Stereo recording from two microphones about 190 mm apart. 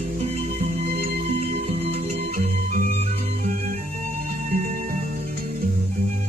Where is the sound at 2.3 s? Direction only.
45° right (ahead or behind).